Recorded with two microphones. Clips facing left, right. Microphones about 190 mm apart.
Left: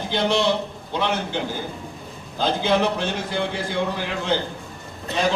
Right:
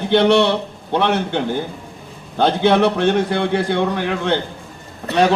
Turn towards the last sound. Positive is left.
turn(degrees=-65)  # may be behind; listen again after turning